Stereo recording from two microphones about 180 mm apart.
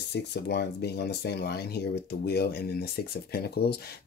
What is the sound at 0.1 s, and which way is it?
Speech, 65° left (ahead or behind).